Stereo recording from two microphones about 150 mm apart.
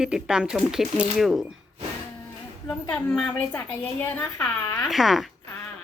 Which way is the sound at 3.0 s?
5° left (ahead or behind).